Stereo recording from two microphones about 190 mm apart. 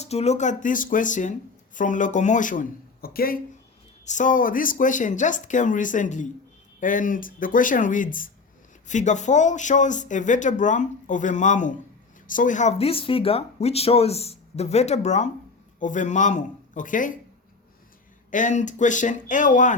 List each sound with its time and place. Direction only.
0.0 s speech: 35° left (ahead or behind); by 3.4 s 50° left (ahead or behind)
4.0 s speech: 40° left (ahead or behind)
18.3 s speech: 40° left (ahead or behind)